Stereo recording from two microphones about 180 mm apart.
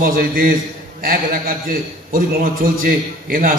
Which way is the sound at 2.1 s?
50° right (ahead or behind).